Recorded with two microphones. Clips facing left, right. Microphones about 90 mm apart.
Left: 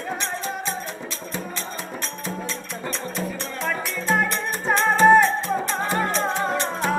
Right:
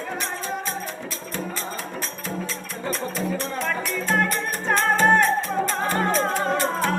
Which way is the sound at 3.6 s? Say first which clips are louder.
Left 4 dB; 5° left (ahead or behind).